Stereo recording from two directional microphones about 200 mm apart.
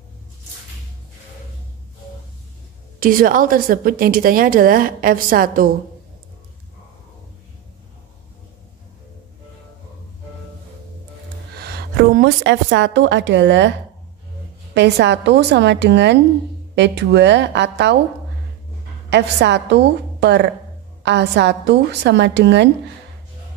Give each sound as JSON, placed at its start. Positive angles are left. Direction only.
{"t": 3.0, "sound": "a woman's voice", "side_deg": -45}
{"t": 11.5, "sound": "music", "side_deg": -55}
{"t": 12.4, "sound": "a woman's voice", "side_deg": -65}
{"t": 19.0, "sound": "a woman's voice", "side_deg": -60}